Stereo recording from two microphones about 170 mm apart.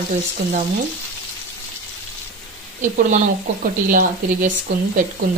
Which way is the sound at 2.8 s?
50° right (ahead or behind).